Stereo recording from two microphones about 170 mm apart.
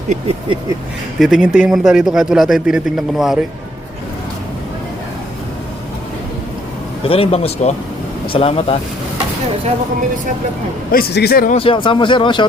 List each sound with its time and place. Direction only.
1.2 s speech: 5° right (ahead or behind)
7.0 s a man's voice: 35° left (ahead or behind)
10.9 s a man's voice: 70° left (ahead or behind)
11.5 s a man's voice: 30° left (ahead or behind)